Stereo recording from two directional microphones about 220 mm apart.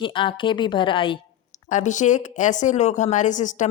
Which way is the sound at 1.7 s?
35° left (ahead or behind).